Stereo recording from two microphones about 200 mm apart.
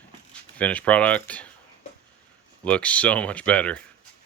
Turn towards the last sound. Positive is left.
turn(degrees=5)  # may be behind; listen again after turning